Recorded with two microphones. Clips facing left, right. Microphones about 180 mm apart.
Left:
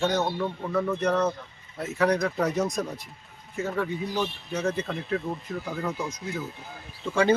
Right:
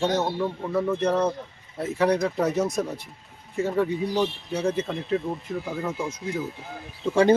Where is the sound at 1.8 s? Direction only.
30° right (ahead or behind).